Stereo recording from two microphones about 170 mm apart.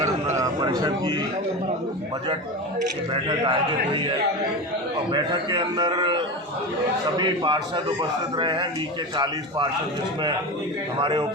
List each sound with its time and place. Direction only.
0.3 s speech: 20° right (ahead or behind)
3.1 s a man's voice: 30° right (ahead or behind)
5.1 s a man's voice: 25° right (ahead or behind)
11.0 s a man's voice: 30° right (ahead or behind)